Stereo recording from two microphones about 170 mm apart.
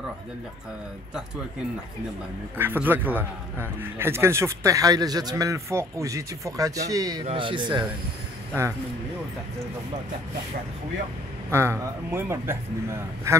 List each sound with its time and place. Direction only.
2.5 s a man's voice: 10° right (ahead or behind); by 7.8 s 30° right (ahead or behind)
11.5 s a man's voice: 15° right (ahead or behind)